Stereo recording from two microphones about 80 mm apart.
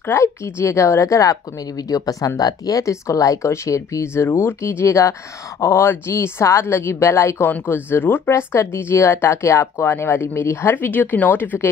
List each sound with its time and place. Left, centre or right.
0.0 s a woman's voice: left